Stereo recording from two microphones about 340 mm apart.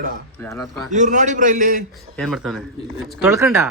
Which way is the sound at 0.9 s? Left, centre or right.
Right.